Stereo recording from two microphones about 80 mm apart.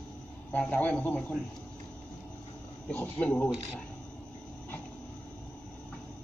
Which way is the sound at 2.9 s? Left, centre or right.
Left.